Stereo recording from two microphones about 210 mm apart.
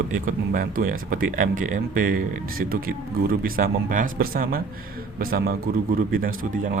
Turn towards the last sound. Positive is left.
turn(degrees=-40)  # may be behind; listen again after turning